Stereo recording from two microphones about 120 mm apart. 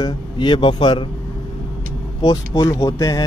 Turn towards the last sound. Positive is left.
turn(degrees=30)  # may be behind; listen again after turning